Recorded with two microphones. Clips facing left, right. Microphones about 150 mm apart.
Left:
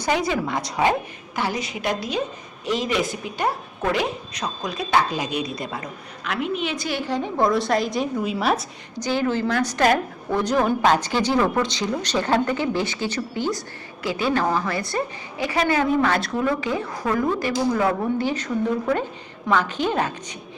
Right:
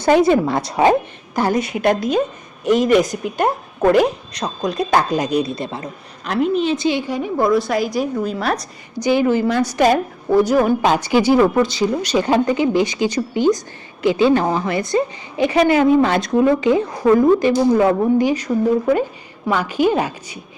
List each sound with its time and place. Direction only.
0.0 s a woman's voice: 25° right (ahead or behind)
1.4 s a woman's voice: 50° right (ahead or behind); by 8.6 s 5° left (ahead or behind)
9.0 s a woman's voice: 15° right (ahead or behind)